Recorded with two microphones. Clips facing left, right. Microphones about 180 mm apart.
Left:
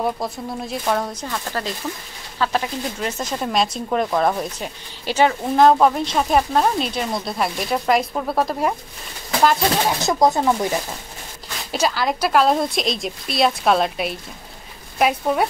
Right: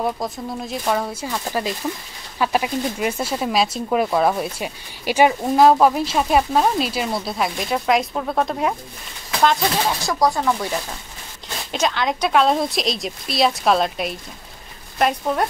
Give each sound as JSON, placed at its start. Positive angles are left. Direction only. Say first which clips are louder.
{"t": 0.0, "sound": "speech", "louder": "even", "side_deg": 0}
{"t": 9.9, "sound": "speech", "louder": "left 2 dB", "side_deg": 20}
{"t": 11.7, "sound": "speech", "louder": "left 1 dB", "side_deg": 5}